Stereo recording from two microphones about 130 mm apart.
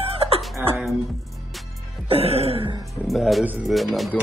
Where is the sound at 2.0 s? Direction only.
50° right (ahead or behind).